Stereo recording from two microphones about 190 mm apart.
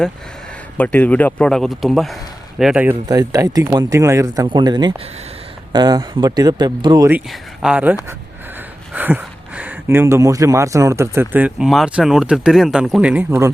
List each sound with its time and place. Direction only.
0.8 s speech: 10° left (ahead or behind)
3.1 s speech: 20° right (ahead or behind)
7.3 s speech: 5° right (ahead or behind)